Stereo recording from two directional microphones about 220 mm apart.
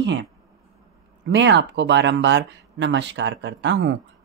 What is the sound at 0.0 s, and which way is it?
Speech, 55° right (ahead or behind).